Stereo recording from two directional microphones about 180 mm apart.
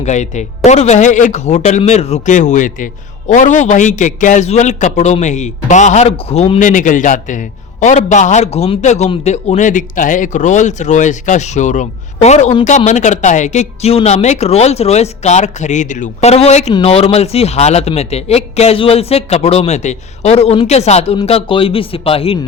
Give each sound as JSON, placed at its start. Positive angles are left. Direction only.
{"t": 0.0, "sound": "speech", "side_deg": 40}